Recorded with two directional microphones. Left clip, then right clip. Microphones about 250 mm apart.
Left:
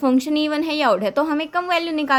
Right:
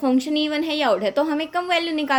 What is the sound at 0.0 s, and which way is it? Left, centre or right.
A woman's voice, left.